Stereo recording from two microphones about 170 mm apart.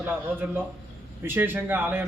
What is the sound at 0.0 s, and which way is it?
A man's voice, 10° right (ahead or behind).